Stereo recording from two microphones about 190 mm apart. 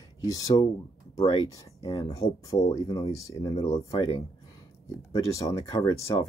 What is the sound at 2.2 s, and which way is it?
Speech, 15° left (ahead or behind).